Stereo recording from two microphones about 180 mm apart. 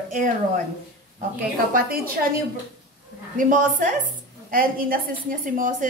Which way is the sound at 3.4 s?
45° right (ahead or behind).